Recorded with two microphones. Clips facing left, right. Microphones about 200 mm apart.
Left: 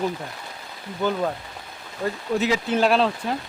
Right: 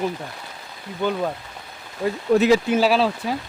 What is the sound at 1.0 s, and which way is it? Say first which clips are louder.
Speech: even; 5° left (ahead or behind).